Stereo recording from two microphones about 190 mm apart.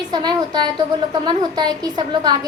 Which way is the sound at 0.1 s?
20° right (ahead or behind).